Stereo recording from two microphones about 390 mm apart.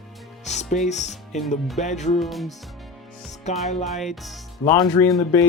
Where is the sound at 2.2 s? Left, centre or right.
Centre.